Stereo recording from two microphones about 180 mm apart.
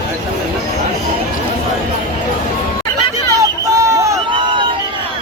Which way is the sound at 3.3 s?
20° right (ahead or behind).